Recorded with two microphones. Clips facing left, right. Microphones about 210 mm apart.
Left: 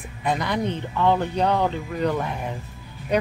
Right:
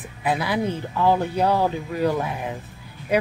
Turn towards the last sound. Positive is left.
turn(degrees=-5)  # may be behind; listen again after turning